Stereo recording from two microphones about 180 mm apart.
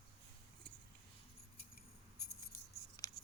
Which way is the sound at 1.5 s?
55° left (ahead or behind).